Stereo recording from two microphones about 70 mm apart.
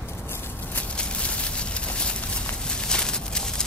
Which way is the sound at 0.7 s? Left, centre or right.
Centre.